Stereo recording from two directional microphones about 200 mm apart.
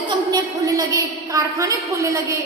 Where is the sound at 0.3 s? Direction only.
20° right (ahead or behind).